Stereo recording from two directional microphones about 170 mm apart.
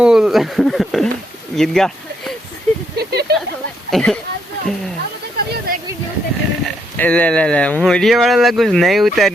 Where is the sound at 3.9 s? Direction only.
5° left (ahead or behind).